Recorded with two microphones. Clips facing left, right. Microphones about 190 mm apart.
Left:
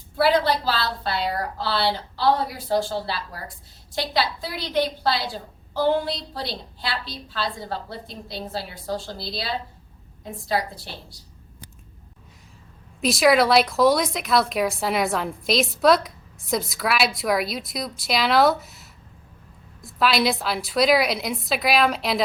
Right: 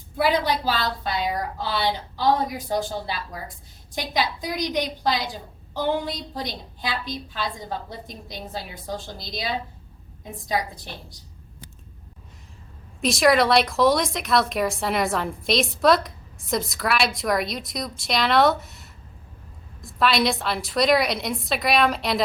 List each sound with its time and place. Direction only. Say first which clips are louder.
0.2 s a woman's voice: left 2 dB; 15° right (ahead or behind)
13.0 s speech: left 1 dB; centre (ahead or behind)